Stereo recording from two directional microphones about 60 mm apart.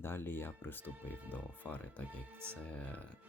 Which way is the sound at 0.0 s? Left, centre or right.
Left.